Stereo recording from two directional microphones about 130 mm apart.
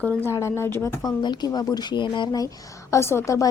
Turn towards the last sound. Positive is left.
turn(degrees=25)  # may be behind; listen again after turning